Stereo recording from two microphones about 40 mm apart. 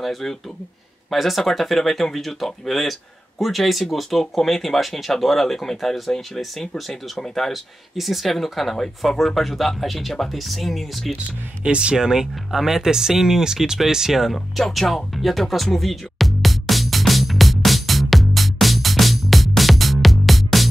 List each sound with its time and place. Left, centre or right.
0.0 s speech: centre
8.0 s speech: centre
11.6 s speech: right
14.3 s music: centre